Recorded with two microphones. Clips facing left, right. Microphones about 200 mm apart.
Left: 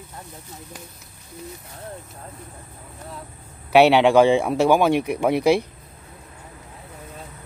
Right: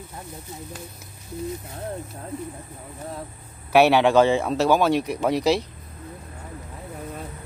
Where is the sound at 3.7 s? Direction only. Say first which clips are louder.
Left 2 dB; 15° left (ahead or behind).